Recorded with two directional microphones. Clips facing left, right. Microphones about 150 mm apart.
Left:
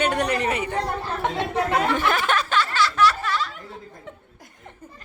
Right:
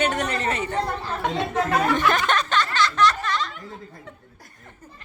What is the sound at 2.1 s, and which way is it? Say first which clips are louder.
Music: right 1 dB; 5° left (ahead or behind).